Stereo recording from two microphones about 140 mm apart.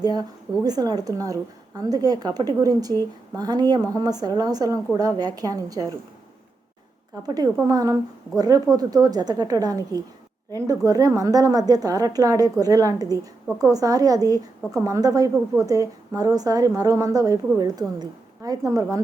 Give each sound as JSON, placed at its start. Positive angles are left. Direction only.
{"t": 0.0, "sound": "a woman's voice", "side_deg": -30}
{"t": 7.3, "sound": "a woman's voice", "side_deg": -25}